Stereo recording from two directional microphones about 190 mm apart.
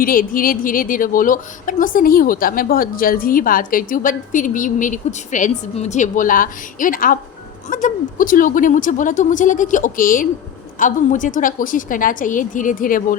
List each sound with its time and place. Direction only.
0.0 s a woman's voice: 50° left (ahead or behind)